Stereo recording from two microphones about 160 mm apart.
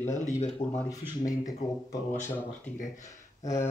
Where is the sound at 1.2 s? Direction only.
20° left (ahead or behind).